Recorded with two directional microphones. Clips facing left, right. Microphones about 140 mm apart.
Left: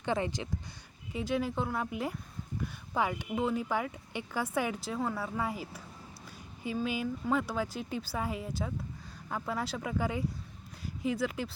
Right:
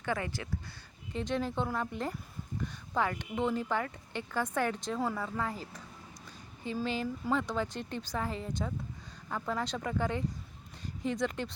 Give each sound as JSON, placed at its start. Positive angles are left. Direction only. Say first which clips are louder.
{"t": 0.0, "sound": "speech", "louder": "left 3 dB", "side_deg": 20}
{"t": 1.1, "sound": "speech", "louder": "left 1 dB", "side_deg": 5}